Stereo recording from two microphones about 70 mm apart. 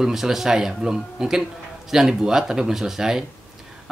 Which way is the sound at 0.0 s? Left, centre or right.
Centre.